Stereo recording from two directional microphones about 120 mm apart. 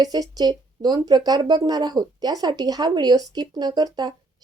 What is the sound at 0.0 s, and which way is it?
A woman's voice, 35° right (ahead or behind).